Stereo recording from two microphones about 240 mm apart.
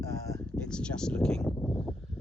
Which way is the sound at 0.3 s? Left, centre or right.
Centre.